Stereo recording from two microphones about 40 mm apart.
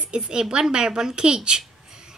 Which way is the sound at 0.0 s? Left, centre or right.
Right.